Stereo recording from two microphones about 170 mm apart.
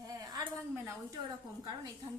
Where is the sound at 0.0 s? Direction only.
20° right (ahead or behind).